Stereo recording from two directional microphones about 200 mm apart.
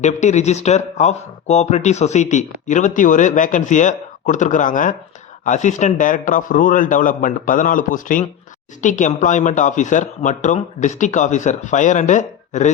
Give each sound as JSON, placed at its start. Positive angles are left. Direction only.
{"t": 0.0, "sound": "speech", "side_deg": 35}